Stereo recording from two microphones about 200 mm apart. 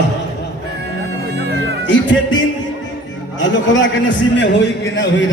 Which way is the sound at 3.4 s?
65° left (ahead or behind).